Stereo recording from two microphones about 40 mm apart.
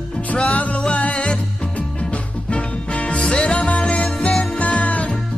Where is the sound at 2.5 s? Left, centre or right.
Left.